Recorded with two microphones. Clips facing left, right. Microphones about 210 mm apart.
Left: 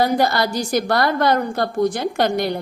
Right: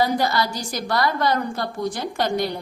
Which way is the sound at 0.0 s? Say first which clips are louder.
Left 3 dB; 60° left (ahead or behind).